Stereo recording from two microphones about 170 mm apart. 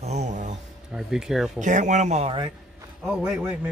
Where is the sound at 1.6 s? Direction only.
45° right (ahead or behind).